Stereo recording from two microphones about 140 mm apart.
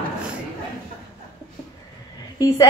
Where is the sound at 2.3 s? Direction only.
25° left (ahead or behind).